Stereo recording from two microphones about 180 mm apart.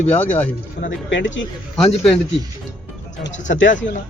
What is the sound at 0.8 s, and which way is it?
Speech, 75° left (ahead or behind).